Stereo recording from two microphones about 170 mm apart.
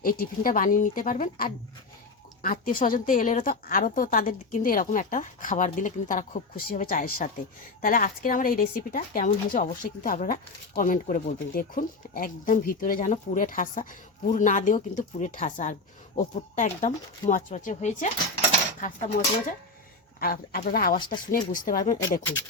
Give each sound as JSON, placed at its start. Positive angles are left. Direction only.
{"t": 0.0, "sound": "a woman's voice", "side_deg": 60}
{"t": 20.1, "sound": "speech", "side_deg": 60}